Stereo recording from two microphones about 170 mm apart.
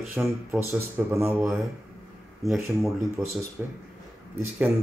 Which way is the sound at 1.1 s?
15° right (ahead or behind).